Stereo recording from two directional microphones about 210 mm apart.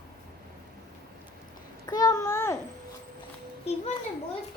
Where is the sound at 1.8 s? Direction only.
15° left (ahead or behind).